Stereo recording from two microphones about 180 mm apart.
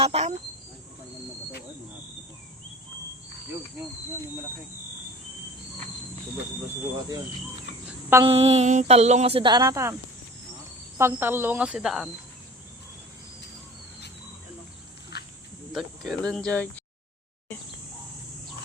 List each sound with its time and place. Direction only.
0.0 s a sound: 35° right (ahead or behind)
8.2 s speech: 30° right (ahead or behind)
10.9 s speech: 15° right (ahead or behind)
15.7 s speech: centre (ahead or behind)